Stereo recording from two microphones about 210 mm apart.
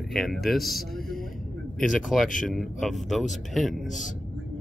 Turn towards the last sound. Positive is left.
turn(degrees=0)  # may be behind; listen again after turning